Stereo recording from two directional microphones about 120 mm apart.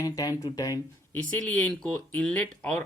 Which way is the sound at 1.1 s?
15° left (ahead or behind).